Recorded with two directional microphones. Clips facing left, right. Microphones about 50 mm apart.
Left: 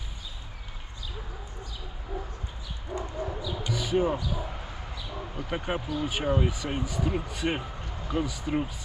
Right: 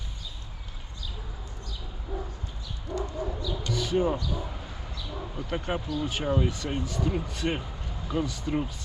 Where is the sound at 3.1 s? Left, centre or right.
Centre.